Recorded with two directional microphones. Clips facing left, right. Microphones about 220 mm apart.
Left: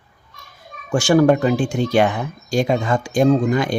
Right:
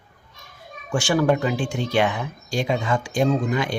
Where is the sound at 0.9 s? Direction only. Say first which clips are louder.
Left 6 dB; 45° left (ahead or behind).